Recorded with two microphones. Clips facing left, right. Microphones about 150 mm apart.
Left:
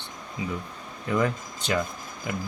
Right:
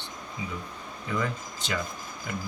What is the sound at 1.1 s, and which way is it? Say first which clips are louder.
Speech: left 5 dB; 55° left (ahead or behind).